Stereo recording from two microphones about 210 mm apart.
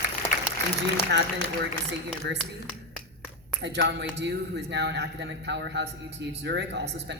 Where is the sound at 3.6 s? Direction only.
55° right (ahead or behind).